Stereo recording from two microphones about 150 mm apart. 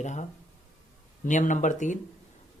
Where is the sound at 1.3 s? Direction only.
55° left (ahead or behind).